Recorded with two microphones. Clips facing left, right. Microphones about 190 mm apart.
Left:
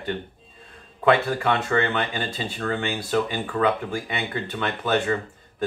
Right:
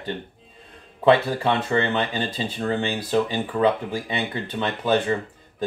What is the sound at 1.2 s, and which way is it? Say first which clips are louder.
Speech: right 1 dB; 20° right (ahead or behind).